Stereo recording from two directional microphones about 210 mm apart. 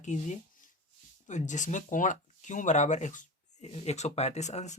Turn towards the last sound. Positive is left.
turn(degrees=35)  # may be behind; listen again after turning